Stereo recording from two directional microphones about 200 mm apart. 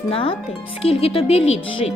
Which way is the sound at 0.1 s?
30° left (ahead or behind).